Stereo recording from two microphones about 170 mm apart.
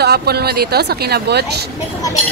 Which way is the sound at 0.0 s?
70° right (ahead or behind).